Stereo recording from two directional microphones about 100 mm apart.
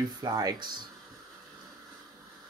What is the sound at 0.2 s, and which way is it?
Speech, 40° right (ahead or behind).